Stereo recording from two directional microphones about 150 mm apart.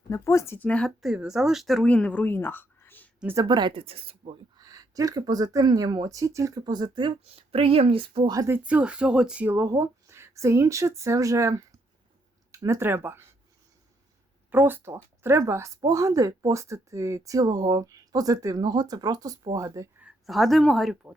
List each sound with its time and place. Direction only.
0.1 s speech: 20° left (ahead or behind)
3.3 s speech: 30° right (ahead or behind)
4.5 s speech: 25° right (ahead or behind)
14.5 s speech: 15° right (ahead or behind)
20.0 s speech: centre (ahead or behind)